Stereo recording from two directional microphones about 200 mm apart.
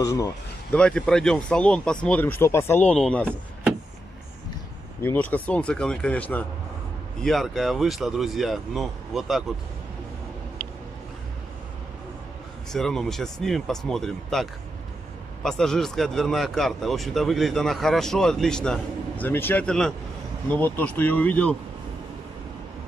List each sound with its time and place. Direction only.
0.0 s speech: 15° left (ahead or behind)
0.7 s speech: 5° left (ahead or behind)
5.0 s speech: 10° left (ahead or behind)
12.7 s speech: centre (ahead or behind)